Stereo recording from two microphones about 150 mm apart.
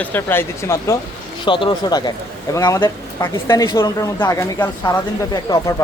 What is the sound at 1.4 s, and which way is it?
Speech, 35° left (ahead or behind).